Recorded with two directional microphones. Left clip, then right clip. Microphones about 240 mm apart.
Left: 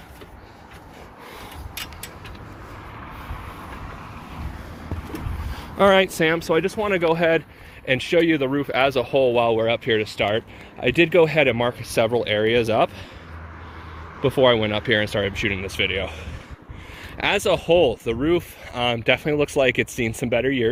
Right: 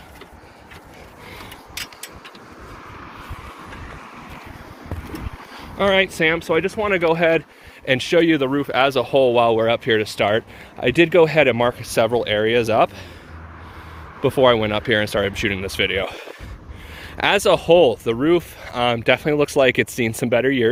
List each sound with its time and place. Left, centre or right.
5.7 s speech: left; by 7.3 s centre
7.9 s speech: right; by 12.9 s centre
14.2 s speech: centre